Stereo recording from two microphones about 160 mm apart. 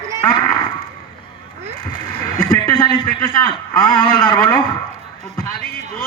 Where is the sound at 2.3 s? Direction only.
25° left (ahead or behind).